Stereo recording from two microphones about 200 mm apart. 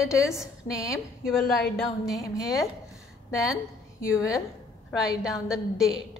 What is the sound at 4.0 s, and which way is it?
Speech, 15° left (ahead or behind).